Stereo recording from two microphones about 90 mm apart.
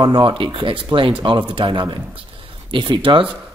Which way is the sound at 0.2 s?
75° right (ahead or behind).